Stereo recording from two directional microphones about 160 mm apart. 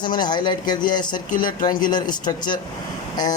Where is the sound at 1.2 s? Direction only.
60° left (ahead or behind).